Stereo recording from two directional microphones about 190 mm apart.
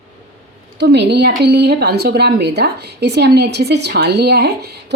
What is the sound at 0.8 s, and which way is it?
A woman's voice, 65° right (ahead or behind).